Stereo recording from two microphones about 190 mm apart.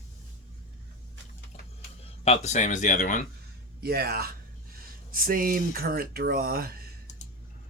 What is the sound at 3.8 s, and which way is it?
Speech, 55° right (ahead or behind).